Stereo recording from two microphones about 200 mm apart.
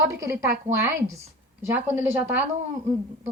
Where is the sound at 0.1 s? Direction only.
15° right (ahead or behind).